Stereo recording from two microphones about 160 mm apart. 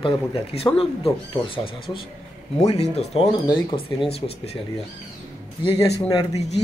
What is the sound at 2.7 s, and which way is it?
Speech, 40° left (ahead or behind).